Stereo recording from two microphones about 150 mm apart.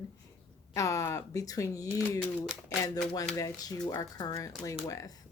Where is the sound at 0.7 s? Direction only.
20° left (ahead or behind).